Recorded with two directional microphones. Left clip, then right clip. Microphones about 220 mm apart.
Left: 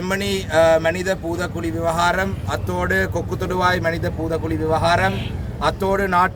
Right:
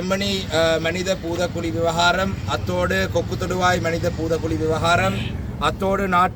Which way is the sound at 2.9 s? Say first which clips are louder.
Left 6 dB; 30° left (ahead or behind).